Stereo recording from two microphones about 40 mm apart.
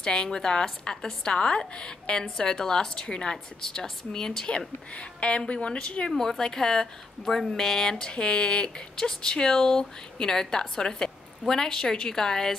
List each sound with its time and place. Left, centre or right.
0.0 s a woman's voice: centre
6.0 s speech: centre
8.1 s speech: left